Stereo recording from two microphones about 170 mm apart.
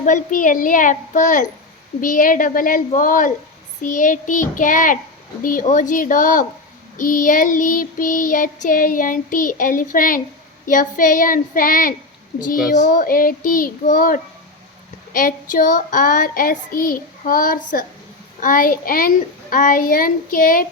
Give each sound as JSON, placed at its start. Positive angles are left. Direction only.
{"t": 0.0, "sound": "child singing", "side_deg": 50}
{"t": 18.3, "sound": "a child's voice", "side_deg": 55}